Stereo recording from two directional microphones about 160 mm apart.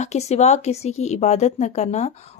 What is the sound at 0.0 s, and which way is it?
A woman's voice, 45° left (ahead or behind).